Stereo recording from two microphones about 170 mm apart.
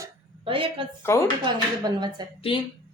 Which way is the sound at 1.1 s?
15° left (ahead or behind).